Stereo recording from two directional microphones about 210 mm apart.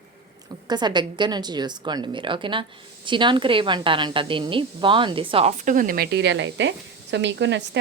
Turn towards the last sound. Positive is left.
turn(degrees=-55)  # may be behind; listen again after turning